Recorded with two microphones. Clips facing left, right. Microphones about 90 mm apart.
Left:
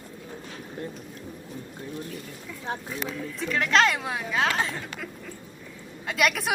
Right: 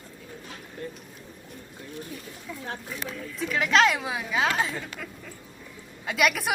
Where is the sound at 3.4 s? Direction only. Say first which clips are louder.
Right 1 dB; 5° right (ahead or behind).